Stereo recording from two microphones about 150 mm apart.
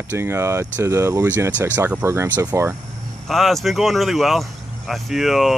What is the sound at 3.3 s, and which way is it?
Speech, centre (ahead or behind).